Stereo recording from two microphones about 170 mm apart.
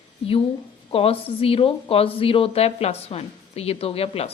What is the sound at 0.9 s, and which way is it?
A woman's voice, 35° left (ahead or behind).